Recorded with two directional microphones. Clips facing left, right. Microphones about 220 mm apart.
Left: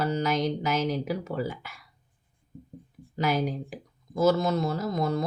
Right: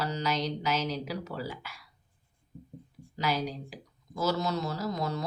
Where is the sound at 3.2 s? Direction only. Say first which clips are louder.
Left 5 dB; 50° left (ahead or behind).